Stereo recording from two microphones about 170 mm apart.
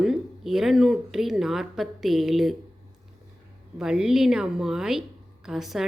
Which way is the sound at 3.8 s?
5° right (ahead or behind).